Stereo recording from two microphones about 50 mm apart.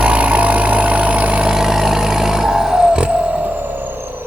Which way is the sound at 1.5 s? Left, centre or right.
Centre.